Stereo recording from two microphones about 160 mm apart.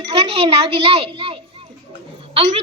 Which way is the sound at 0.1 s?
40° right (ahead or behind).